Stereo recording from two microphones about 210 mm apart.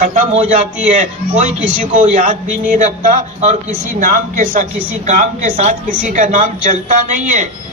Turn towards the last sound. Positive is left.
turn(degrees=-35)  # may be behind; listen again after turning